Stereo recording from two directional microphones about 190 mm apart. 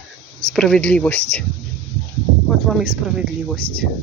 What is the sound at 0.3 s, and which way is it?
Speech, 5° left (ahead or behind).